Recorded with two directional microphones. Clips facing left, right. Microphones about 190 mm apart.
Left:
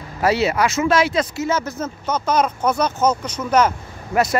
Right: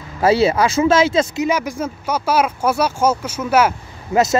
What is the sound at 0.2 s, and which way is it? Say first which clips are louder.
Speech: right 4 dB; 30° right (ahead or behind).